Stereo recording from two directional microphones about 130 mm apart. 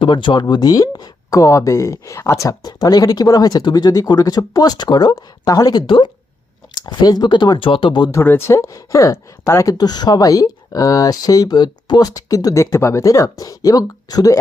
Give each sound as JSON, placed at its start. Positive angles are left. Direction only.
{"t": 0.0, "sound": "speech", "side_deg": 40}
{"t": 8.1, "sound": "speech", "side_deg": 15}